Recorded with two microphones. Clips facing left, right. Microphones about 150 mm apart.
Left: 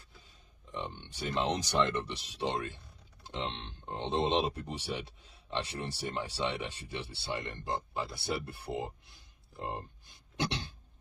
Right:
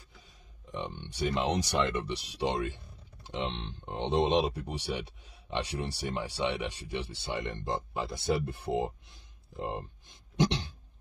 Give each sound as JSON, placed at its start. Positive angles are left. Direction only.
{"t": 1.1, "sound": "speech", "side_deg": -15}